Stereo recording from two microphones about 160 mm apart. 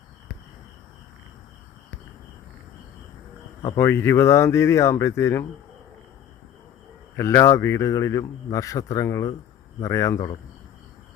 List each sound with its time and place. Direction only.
3.8 s speech: 15° left (ahead or behind)
7.2 s a man's voice: 20° left (ahead or behind)